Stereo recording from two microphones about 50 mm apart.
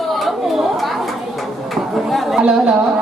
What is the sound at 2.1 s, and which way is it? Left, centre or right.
Chatter, centre.